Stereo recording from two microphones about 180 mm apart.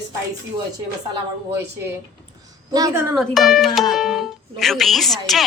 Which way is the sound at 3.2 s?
Centre (ahead or behind).